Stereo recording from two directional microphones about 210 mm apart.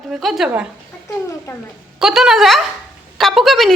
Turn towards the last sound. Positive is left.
turn(degrees=0)  # may be behind; listen again after turning